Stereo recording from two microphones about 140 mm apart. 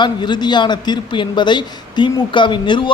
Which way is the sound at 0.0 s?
30° left (ahead or behind).